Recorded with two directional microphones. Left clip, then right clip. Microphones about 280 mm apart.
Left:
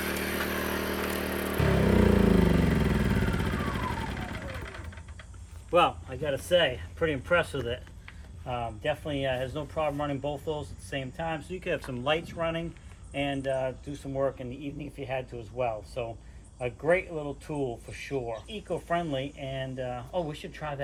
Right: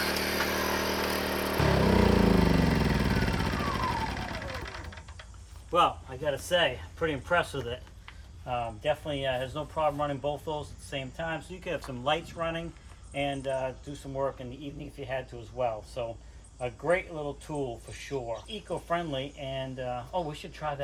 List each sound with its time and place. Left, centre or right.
0.0 s vehicle: right
5.7 s speech: centre